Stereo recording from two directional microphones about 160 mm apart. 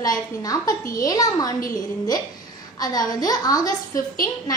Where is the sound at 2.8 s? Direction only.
25° left (ahead or behind).